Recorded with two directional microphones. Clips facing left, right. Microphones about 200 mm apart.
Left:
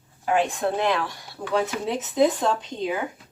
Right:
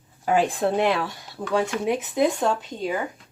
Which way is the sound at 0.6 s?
25° right (ahead or behind).